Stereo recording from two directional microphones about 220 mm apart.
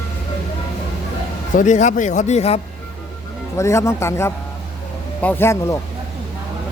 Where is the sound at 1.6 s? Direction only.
35° left (ahead or behind).